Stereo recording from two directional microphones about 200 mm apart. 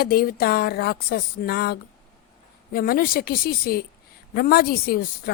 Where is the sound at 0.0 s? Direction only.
50° left (ahead or behind).